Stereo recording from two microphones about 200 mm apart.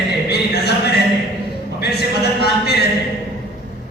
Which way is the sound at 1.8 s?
55° left (ahead or behind).